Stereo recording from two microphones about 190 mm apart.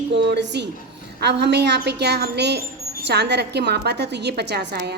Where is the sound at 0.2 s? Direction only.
65° right (ahead or behind).